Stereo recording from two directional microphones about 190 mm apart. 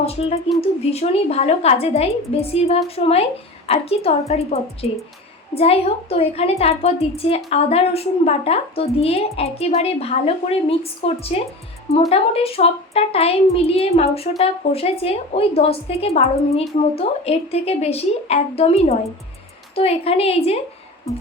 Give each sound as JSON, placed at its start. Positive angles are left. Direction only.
{"t": 0.0, "sound": "a woman's voice", "side_deg": 30}